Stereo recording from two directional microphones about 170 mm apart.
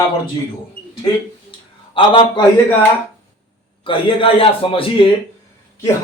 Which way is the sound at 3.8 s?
30° left (ahead or behind).